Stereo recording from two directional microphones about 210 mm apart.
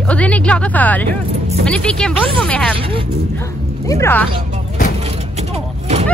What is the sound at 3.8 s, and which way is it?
Speech, 10° left (ahead or behind).